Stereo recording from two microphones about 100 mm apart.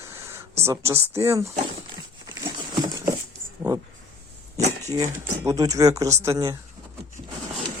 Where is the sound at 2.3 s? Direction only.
35° right (ahead or behind).